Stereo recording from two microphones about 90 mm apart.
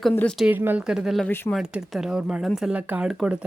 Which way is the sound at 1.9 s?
5° right (ahead or behind).